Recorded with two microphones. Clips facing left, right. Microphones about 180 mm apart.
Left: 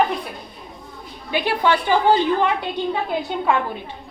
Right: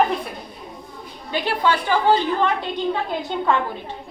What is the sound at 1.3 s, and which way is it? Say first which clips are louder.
Speech: left 2 dB; 15° left (ahead or behind).